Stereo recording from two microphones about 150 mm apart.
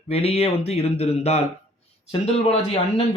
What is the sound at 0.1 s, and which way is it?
Speech, 40° left (ahead or behind).